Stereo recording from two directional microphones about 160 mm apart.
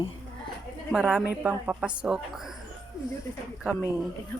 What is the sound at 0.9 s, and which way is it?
A woman's voice, 5° right (ahead or behind).